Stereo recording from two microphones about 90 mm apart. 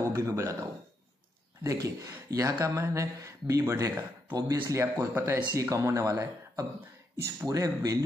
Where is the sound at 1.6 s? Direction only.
40° right (ahead or behind).